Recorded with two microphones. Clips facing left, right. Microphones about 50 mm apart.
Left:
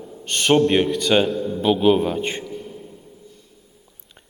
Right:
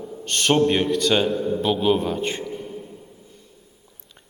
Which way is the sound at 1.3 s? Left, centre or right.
Centre.